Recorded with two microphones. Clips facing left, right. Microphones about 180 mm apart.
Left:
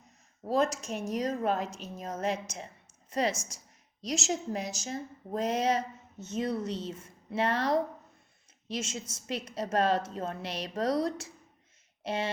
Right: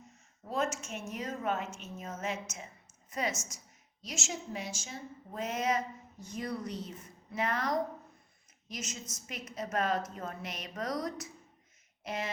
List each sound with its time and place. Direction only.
0.4 s a woman's voice: 35° left (ahead or behind)